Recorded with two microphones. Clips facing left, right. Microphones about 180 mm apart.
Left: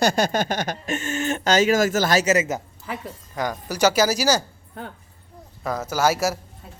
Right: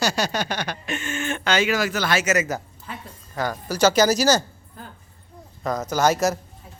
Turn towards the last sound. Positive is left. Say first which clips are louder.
# right 1 dB
turn(degrees=5)  # may be behind; listen again after turning